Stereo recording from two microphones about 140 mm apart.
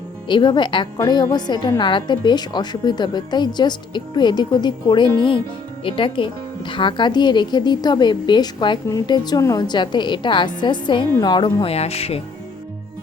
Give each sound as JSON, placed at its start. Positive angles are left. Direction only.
{"t": 0.3, "sound": "a woman's voice", "side_deg": 35}
{"t": 11.4, "sound": "speech", "side_deg": 45}